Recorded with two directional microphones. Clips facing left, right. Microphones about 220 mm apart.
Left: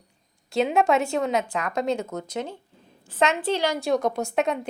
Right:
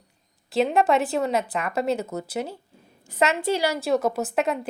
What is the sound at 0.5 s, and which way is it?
Speech, centre (ahead or behind).